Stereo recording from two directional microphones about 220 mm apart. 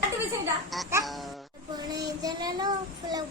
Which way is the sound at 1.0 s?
Centre (ahead or behind).